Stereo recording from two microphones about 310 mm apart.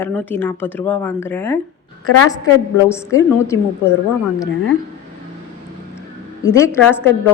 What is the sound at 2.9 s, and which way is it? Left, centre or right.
Speech, centre.